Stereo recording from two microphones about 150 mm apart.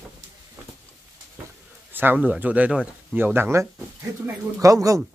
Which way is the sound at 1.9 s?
10° right (ahead or behind).